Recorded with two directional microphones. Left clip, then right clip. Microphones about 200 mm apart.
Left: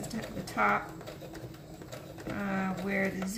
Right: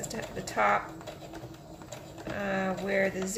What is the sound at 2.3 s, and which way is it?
Speech, 35° right (ahead or behind).